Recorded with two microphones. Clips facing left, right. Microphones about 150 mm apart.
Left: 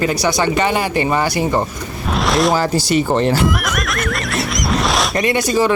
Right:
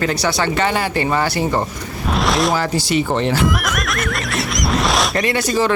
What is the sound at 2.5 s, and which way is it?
Speech, 40° left (ahead or behind).